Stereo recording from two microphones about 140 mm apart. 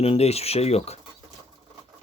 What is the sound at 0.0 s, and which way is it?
Speech, 45° left (ahead or behind).